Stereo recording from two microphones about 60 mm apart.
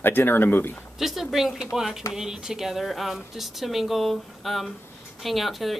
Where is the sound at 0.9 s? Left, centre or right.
Centre.